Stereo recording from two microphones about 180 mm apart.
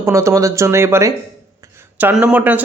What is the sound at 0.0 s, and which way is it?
Speech, 15° right (ahead or behind).